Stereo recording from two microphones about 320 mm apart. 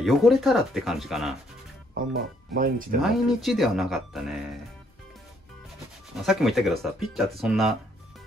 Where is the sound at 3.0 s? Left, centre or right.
Centre.